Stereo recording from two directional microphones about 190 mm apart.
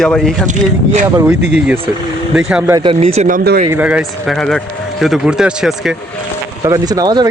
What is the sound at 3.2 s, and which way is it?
Speech, 50° right (ahead or behind).